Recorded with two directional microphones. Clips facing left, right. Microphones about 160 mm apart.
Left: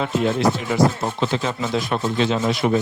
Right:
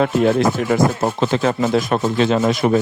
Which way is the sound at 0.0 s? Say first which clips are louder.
Right 4 dB; 55° right (ahead or behind).